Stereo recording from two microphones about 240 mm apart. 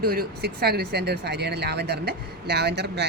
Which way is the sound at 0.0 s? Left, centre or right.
Right.